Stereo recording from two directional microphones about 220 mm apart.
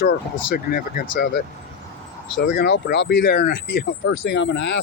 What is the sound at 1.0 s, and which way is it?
Speech, 60° left (ahead or behind).